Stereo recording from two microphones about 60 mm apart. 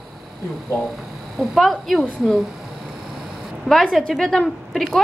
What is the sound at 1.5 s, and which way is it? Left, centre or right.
Speech, centre.